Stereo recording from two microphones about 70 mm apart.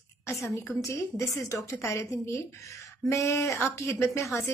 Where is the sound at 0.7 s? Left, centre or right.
Left.